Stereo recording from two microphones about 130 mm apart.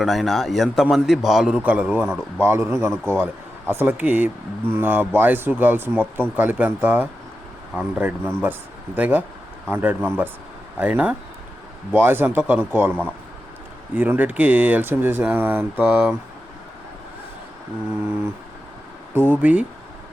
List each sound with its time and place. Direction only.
0.0 s a man's voice: centre (ahead or behind); by 16.1 s 15° right (ahead or behind)
19.1 s speech: 15° right (ahead or behind)